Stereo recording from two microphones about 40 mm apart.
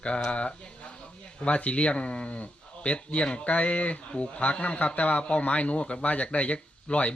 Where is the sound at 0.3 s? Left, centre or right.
Left.